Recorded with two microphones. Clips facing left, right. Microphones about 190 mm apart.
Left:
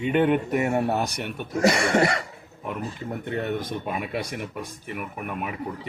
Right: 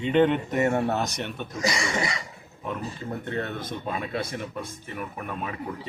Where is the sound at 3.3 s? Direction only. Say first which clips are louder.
Left 6 dB; 15° left (ahead or behind).